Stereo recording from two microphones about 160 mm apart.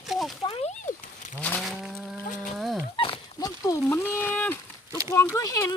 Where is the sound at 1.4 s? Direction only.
10° left (ahead or behind).